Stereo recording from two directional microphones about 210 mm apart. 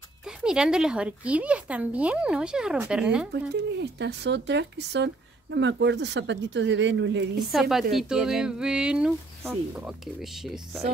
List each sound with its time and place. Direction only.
0.2 s speech: 5° right (ahead or behind)
3.8 s speech: 55° right (ahead or behind)
7.3 s speech: centre (ahead or behind)